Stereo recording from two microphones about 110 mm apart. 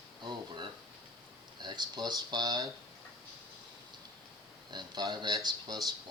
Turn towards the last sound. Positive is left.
turn(degrees=-40)  # may be behind; listen again after turning